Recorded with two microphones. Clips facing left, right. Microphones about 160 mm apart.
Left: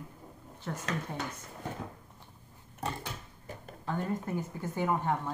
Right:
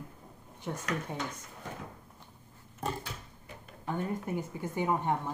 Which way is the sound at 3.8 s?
15° right (ahead or behind).